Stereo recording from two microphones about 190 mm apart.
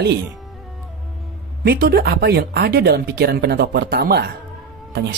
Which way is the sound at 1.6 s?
55° right (ahead or behind).